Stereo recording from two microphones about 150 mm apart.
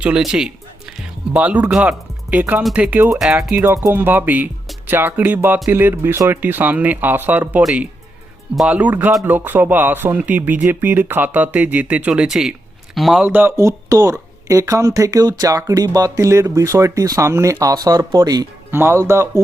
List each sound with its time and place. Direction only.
0.0 s speech: 5° right (ahead or behind)
13.2 s speech: 10° right (ahead or behind)